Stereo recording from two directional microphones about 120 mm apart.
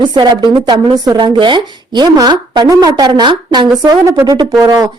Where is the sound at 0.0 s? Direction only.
40° right (ahead or behind).